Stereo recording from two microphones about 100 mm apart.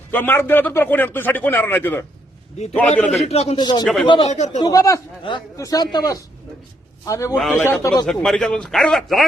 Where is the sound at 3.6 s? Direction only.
50° left (ahead or behind).